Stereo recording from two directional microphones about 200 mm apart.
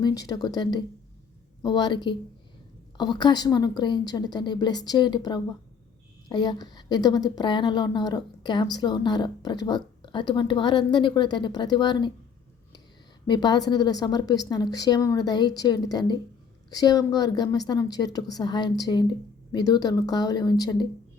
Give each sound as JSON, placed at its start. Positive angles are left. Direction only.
{"t": 0.0, "sound": "a woman's voice", "side_deg": 20}
{"t": 13.2, "sound": "a woman's voice", "side_deg": 20}